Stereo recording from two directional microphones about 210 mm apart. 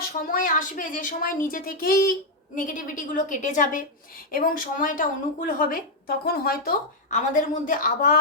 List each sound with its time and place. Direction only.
0.0 s a woman's voice: 40° left (ahead or behind)